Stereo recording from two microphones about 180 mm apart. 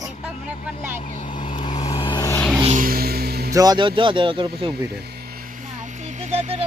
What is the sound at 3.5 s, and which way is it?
Speech, 20° right (ahead or behind).